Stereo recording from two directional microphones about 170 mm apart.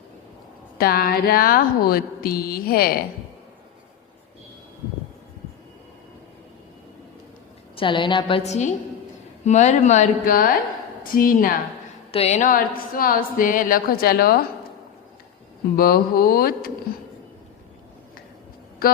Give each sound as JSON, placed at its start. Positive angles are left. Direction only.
{"t": 0.8, "sound": "speech", "side_deg": 60}
{"t": 7.8, "sound": "a woman's voice", "side_deg": 30}
{"t": 8.4, "sound": "speech", "side_deg": 45}
{"t": 12.1, "sound": "speech", "side_deg": 40}
{"t": 15.7, "sound": "speech", "side_deg": 60}